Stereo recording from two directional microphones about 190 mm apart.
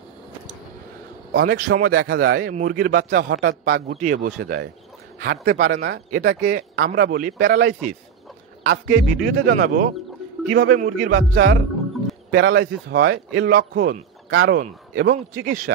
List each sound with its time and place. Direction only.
1.3 s a man's voice: 50° right (ahead or behind)
12.3 s speech: 75° right (ahead or behind); by 13.9 s 60° right (ahead or behind)
14.3 s speech: 90° right
15.0 s a man's voice: 55° right (ahead or behind)